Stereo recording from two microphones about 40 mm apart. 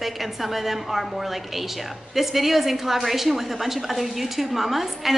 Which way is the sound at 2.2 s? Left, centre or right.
Centre.